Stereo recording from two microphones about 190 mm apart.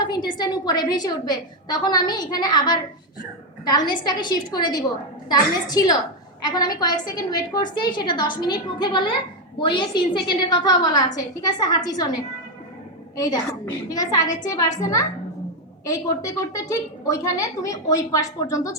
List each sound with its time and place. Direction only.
0.0 s a woman's voice: 20° left (ahead or behind)
13.1 s a woman's voice: 20° left (ahead or behind)